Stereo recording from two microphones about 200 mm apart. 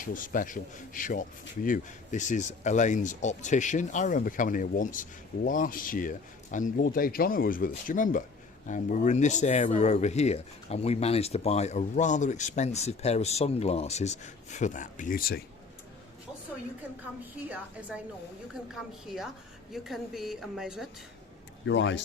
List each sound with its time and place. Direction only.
0.0 s speech: 45° left (ahead or behind)
17.5 s a woman's voice: 5° right (ahead or behind)
21.7 s speech: 65° left (ahead or behind)